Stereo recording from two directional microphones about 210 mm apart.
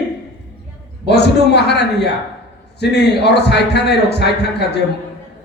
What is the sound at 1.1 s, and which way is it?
A man's voice, 50° left (ahead or behind).